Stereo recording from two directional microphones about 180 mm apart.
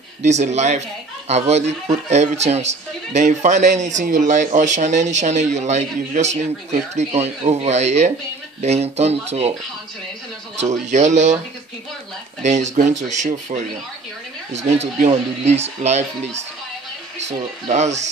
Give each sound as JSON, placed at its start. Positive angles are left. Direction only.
{"t": 0.2, "sound": "speech", "side_deg": -40}
{"t": 10.6, "sound": "speech", "side_deg": -40}
{"t": 12.4, "sound": "speech", "side_deg": -40}